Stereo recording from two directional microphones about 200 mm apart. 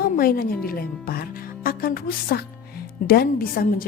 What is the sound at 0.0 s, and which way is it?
Speech, 45° left (ahead or behind).